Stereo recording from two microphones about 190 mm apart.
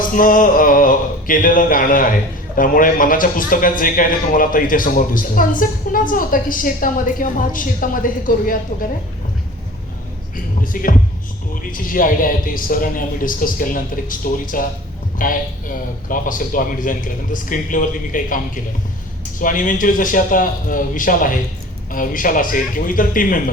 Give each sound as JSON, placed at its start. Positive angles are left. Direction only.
{"t": 0.2, "sound": "a man's voice", "side_deg": 45}
{"t": 10.3, "sound": "a sound", "side_deg": 45}
{"t": 11.7, "sound": "a man's voice", "side_deg": 45}